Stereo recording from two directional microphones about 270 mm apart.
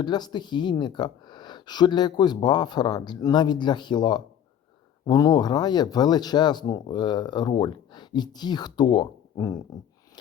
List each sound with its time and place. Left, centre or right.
0.0 s speech: centre